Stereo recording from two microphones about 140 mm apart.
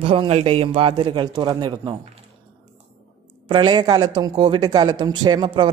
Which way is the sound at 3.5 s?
35° right (ahead or behind).